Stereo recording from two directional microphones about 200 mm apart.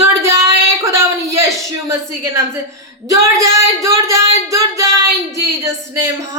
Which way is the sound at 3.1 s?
15° right (ahead or behind).